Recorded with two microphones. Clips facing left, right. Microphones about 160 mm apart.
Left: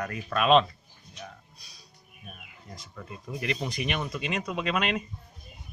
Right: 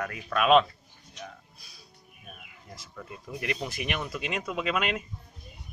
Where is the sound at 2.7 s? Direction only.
5° right (ahead or behind).